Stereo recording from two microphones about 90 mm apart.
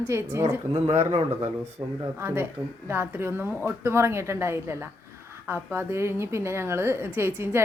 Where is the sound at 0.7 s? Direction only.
90° right.